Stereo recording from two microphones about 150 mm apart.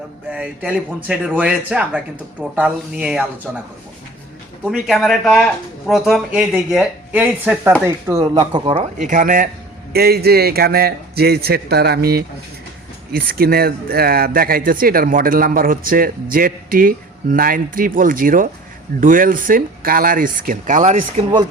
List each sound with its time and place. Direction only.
0.3 s a man's voice: 5° right (ahead or behind)
4.6 s a man's voice: 5° right (ahead or behind)
8.4 s speech: 30° right (ahead or behind)
8.7 s speech: 50° right (ahead or behind); by 9.5 s 70° right (ahead or behind)
9.9 s a man's voice: 90° right; by 21.0 s 60° right (ahead or behind)